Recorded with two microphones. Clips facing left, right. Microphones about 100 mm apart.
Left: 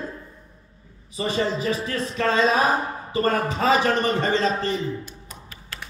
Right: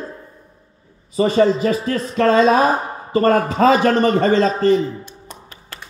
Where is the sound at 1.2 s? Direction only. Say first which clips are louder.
Right 9 dB; 45° right (ahead or behind).